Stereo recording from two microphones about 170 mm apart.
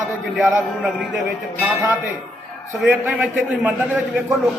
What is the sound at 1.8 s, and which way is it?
A man's voice, 10° right (ahead or behind).